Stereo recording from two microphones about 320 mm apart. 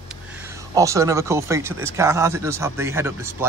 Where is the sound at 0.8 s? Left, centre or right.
Centre.